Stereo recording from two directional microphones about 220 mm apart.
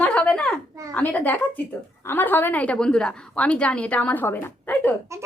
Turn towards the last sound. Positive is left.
turn(degrees=-15)  # may be behind; listen again after turning